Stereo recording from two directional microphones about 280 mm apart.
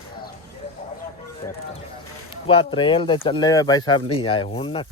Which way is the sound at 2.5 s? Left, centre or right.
Centre.